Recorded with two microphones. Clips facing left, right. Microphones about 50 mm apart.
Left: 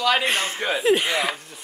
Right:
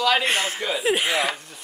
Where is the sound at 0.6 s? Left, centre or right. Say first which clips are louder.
Left 2 dB; left.